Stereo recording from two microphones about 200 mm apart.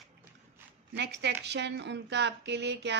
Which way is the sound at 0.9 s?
60° right (ahead or behind).